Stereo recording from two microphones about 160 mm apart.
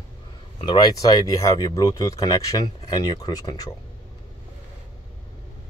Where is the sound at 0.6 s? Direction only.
30° left (ahead or behind).